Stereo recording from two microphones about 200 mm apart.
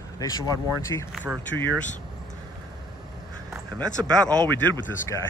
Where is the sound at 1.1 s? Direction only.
5° right (ahead or behind).